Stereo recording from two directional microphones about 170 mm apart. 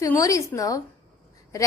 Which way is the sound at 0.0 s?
20° left (ahead or behind).